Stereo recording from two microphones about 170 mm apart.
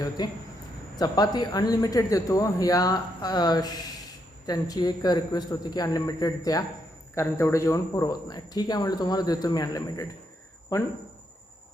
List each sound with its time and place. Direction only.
0.2 s speech: 25° left (ahead or behind)